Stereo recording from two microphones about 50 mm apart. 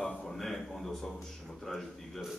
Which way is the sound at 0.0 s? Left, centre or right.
Centre.